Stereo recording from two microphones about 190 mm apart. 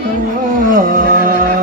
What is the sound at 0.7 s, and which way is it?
Music, 45° right (ahead or behind).